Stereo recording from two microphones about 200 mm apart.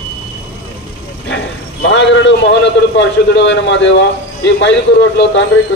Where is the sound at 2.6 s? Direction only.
65° left (ahead or behind).